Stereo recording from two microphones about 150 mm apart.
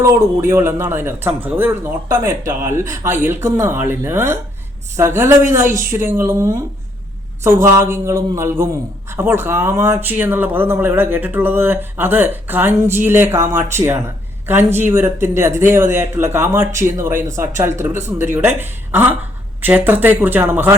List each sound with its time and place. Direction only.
0.0 s speech: 15° right (ahead or behind)